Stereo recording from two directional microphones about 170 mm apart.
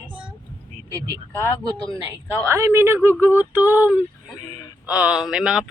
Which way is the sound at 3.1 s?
10° left (ahead or behind).